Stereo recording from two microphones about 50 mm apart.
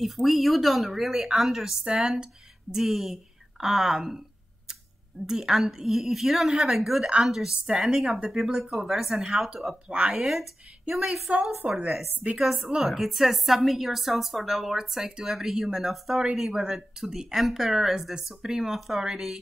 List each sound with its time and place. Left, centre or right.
0.0 s a woman's voice: centre
5.2 s a woman's voice: centre
9.8 s speech: right
10.9 s a woman's voice: centre